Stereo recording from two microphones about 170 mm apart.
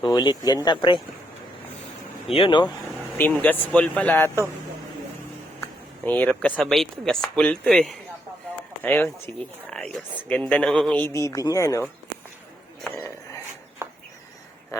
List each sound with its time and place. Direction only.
0.0 s speech: 25° left (ahead or behind)
2.3 s speech: 30° left (ahead or behind)
3.2 s speech: 10° left (ahead or behind)
6.1 s speech: 10° left (ahead or behind)
14.7 s speech: 20° left (ahead or behind)